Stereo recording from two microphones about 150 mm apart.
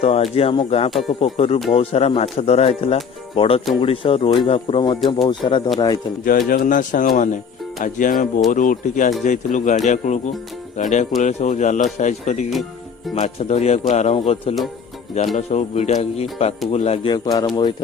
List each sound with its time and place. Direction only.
0.0 s speech: 40° left (ahead or behind)
6.2 s a man's voice: 70° left (ahead or behind); by 17.2 s 40° left (ahead or behind)
17.2 s speech: 30° left (ahead or behind)